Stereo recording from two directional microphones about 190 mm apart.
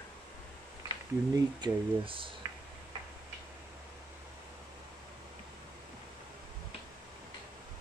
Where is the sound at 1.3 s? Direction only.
25° right (ahead or behind).